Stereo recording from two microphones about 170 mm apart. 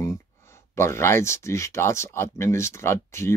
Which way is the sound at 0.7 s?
15° left (ahead or behind).